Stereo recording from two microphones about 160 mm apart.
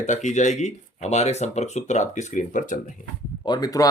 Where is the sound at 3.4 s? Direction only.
25° left (ahead or behind).